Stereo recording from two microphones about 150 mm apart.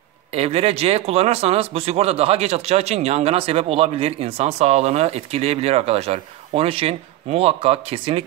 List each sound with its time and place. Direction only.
0.3 s speech: 45° right (ahead or behind)